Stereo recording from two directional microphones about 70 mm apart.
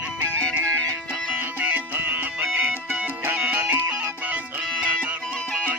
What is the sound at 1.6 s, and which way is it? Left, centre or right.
Music, right.